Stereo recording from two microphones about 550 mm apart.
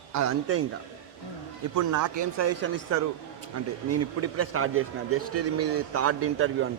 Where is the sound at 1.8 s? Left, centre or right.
Right.